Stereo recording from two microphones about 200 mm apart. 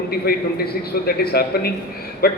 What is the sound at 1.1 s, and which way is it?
A man's voice, 50° left (ahead or behind).